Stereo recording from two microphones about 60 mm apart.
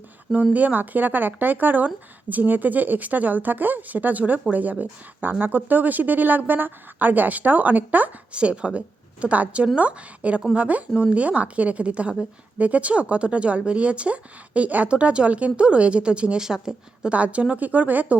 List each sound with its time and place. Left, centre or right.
0.5 s speech: right; by 17.1 s centre
17.1 s speech: right